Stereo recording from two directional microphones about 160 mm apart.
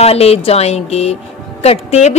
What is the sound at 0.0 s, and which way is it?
A woman's voice, 40° left (ahead or behind).